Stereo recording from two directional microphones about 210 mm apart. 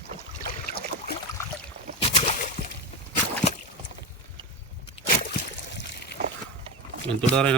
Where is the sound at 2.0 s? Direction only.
30° left (ahead or behind).